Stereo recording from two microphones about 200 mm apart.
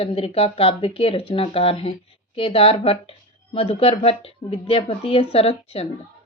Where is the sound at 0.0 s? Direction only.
30° left (ahead or behind).